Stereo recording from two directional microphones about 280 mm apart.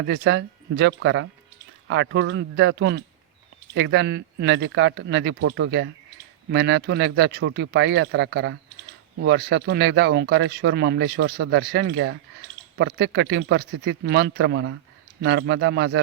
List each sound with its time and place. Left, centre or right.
0.0 s speech: right